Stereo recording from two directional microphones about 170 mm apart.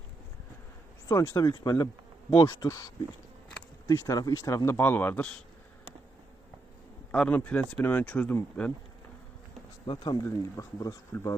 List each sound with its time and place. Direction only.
1.0 s speech: 15° left (ahead or behind)
7.1 s speech: 10° left (ahead or behind)
9.8 s speech: 25° left (ahead or behind)